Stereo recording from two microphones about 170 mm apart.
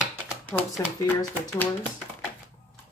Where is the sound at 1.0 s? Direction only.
10° left (ahead or behind).